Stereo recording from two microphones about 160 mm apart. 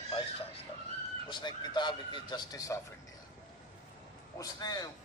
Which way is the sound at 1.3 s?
30° left (ahead or behind).